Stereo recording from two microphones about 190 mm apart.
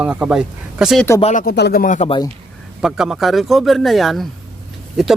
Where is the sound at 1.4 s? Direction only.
55° left (ahead or behind).